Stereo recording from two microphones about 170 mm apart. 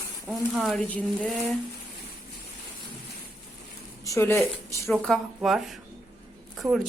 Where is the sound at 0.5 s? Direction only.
Centre (ahead or behind).